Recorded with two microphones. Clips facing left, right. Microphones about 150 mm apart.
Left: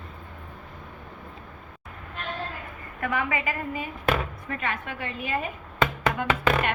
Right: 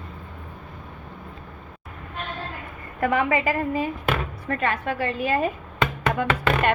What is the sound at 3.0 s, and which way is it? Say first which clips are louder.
A woman's voice: right 6 dB; 30° right (ahead or behind).